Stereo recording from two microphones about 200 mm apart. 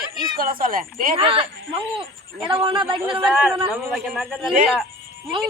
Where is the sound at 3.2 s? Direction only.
5° right (ahead or behind).